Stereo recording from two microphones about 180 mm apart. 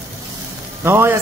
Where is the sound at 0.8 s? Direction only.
15° right (ahead or behind).